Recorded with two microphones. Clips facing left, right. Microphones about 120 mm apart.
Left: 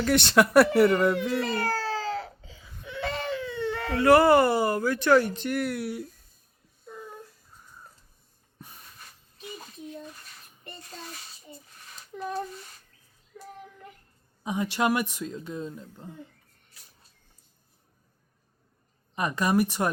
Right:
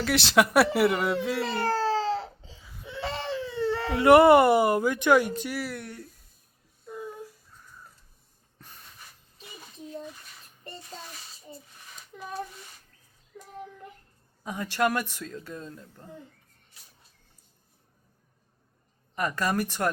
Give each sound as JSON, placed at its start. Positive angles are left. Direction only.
{"t": 0.0, "sound": "speech", "side_deg": 0}
{"t": 1.5, "sound": "baby cry", "side_deg": -30}
{"t": 2.8, "sound": "speech", "side_deg": -30}
{"t": 8.5, "sound": "a sound", "side_deg": 10}
{"t": 12.1, "sound": "a sound", "side_deg": 5}
{"t": 14.4, "sound": "speech", "side_deg": 15}
{"t": 19.1, "sound": "speech", "side_deg": 15}